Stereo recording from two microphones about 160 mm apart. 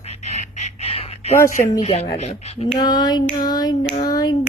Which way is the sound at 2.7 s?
25° left (ahead or behind).